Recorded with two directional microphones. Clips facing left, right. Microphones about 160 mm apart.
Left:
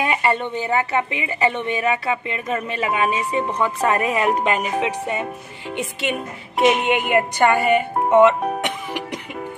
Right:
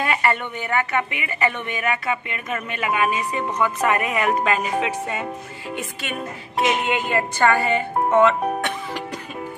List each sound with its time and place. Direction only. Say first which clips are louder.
0.0 s a woman's voice: left 2 dB; 20° left (ahead or behind)
8.5 s music: left 1 dB; 15° left (ahead or behind)